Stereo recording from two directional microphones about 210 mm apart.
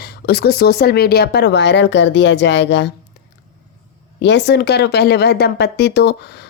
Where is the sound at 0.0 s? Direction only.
50° left (ahead or behind).